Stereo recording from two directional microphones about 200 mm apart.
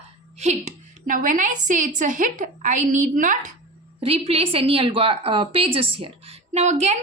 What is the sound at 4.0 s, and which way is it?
A woman's voice, 30° right (ahead or behind).